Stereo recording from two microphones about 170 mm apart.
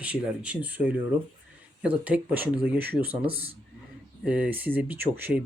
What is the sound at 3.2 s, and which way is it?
Speech, 35° right (ahead or behind).